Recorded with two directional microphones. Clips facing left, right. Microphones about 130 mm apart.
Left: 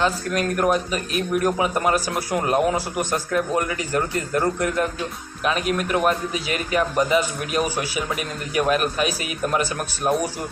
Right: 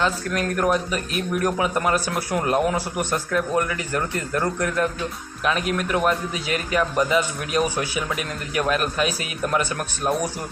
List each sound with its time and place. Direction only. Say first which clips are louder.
0.0 s a man's voice: left 1 dB; 20° left (ahead or behind)